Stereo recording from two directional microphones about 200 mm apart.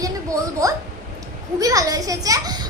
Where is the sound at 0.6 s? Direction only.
15° right (ahead or behind).